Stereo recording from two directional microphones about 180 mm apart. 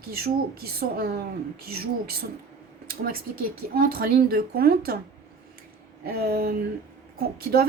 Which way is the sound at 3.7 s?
55° right (ahead or behind).